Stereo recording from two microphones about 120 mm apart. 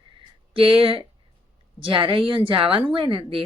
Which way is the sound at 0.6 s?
50° right (ahead or behind).